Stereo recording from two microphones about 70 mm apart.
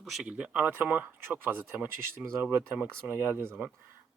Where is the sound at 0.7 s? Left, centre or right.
Right.